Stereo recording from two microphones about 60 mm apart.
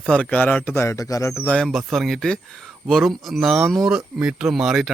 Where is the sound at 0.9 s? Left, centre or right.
Left.